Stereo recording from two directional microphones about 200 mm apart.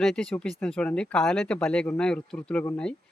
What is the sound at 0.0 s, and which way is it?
Speech, 5° left (ahead or behind).